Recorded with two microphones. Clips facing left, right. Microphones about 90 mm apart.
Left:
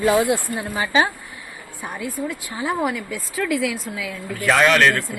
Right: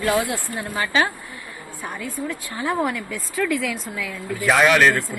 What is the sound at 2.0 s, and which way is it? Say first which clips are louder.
Speech: left 3 dB; 15° left (ahead or behind).